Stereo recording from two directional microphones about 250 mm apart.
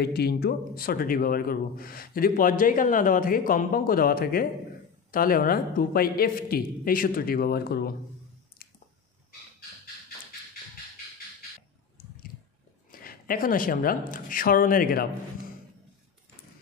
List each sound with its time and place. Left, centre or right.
0.0 s a woman's voice: left
8.6 s squish: left
12.9 s speech: left